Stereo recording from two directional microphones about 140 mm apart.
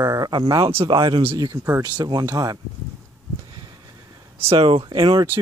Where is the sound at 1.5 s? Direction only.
20° right (ahead or behind).